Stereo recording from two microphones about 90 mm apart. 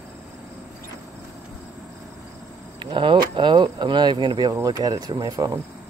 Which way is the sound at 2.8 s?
65° right (ahead or behind).